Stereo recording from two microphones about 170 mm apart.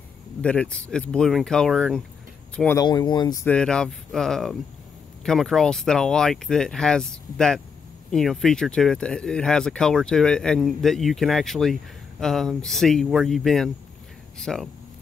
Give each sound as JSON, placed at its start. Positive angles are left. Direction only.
{"t": 0.4, "sound": "speech", "side_deg": 5}
{"t": 2.8, "sound": "speech", "side_deg": 25}
{"t": 3.4, "sound": "speech", "side_deg": 5}